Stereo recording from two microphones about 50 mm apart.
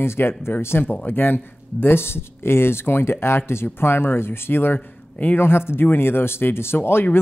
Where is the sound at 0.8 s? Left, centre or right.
Left.